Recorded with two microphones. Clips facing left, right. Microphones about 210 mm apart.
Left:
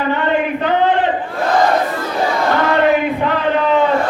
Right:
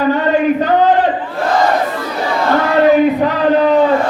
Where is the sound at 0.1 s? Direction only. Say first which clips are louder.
Right 3 dB; 40° right (ahead or behind).